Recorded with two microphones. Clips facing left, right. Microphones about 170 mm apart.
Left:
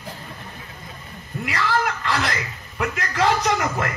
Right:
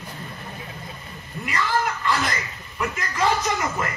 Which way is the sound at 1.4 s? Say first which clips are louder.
Left 1 dB; 80° left.